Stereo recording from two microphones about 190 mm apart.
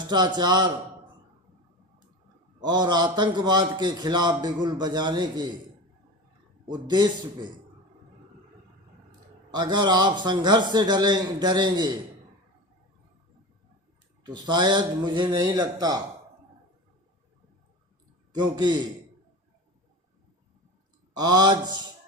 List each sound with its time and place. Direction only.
0.0 s a man's voice: 25° right (ahead or behind)
2.6 s a man's voice: 20° right (ahead or behind)
6.7 s a man's voice: 25° right (ahead or behind)
9.5 s a man's voice: 20° right (ahead or behind)
14.3 s a man's voice: 20° right (ahead or behind)
18.3 s a man's voice: 20° right (ahead or behind)
21.2 s a man's voice: 20° right (ahead or behind)